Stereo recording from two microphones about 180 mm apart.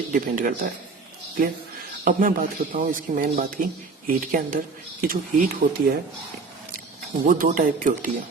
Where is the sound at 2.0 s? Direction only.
50° right (ahead or behind).